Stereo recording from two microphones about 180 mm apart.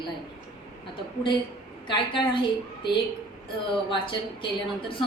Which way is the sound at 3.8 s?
25° left (ahead or behind).